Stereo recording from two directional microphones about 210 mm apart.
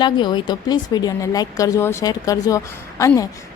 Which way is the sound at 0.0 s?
20° left (ahead or behind).